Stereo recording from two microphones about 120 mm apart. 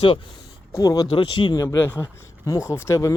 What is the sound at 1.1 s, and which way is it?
Speech, 45° left (ahead or behind).